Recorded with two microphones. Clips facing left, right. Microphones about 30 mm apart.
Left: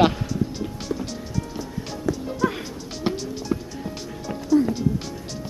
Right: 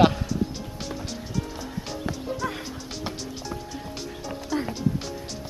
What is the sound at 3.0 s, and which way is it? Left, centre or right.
Music, centre.